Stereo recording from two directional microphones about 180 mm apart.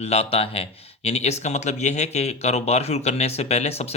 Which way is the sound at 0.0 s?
35° left (ahead or behind).